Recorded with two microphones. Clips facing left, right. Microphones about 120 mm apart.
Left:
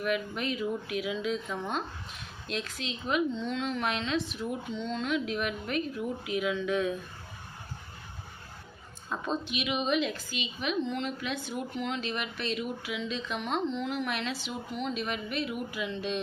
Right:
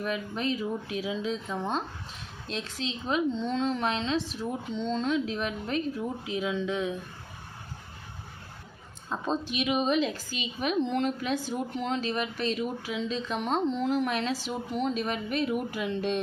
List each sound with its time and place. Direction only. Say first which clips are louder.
0.0 s speech: even; 30° right (ahead or behind)
9.0 s speech: right 2 dB; 30° right (ahead or behind); by 16.2 s 50° right (ahead or behind)